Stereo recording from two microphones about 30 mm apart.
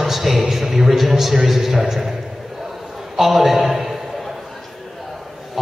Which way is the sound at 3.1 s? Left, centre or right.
Centre.